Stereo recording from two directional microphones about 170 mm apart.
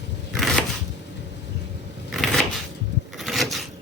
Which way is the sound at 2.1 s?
Centre (ahead or behind).